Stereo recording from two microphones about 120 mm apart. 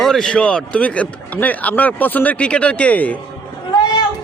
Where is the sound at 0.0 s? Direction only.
5° left (ahead or behind).